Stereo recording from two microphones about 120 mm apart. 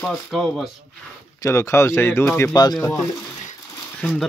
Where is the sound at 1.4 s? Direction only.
20° left (ahead or behind).